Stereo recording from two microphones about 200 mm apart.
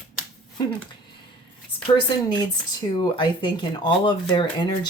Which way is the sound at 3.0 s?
20° left (ahead or behind).